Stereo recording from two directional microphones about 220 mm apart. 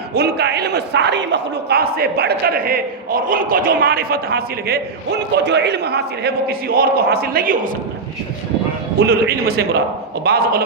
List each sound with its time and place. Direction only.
0.1 s a man's voice: 45° right (ahead or behind)
9.0 s a man's voice: 45° right (ahead or behind)